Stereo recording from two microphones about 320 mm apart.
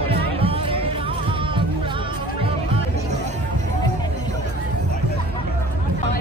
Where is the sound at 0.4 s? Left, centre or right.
Centre.